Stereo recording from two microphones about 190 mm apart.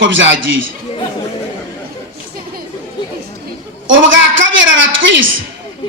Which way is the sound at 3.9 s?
80° right.